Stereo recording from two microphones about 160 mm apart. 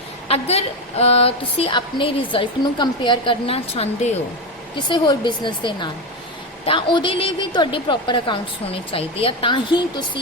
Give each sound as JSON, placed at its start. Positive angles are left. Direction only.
{"t": 0.3, "sound": "a woman's voice", "side_deg": 40}
{"t": 4.9, "sound": "a woman's voice", "side_deg": 25}